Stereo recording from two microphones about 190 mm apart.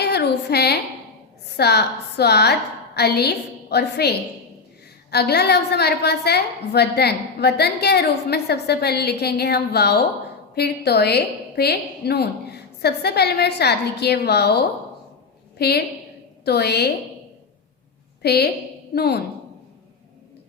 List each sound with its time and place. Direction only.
0.0 s a sound: 60° left (ahead or behind)
1.5 s a woman's voice: 60° left (ahead or behind)
5.1 s a woman's voice: 60° left (ahead or behind)
18.2 s a woman's voice: 55° left (ahead or behind)